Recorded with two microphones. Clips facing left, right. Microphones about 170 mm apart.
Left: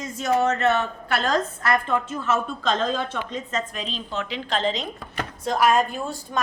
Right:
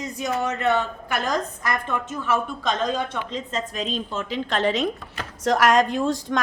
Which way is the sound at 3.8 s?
45° right (ahead or behind).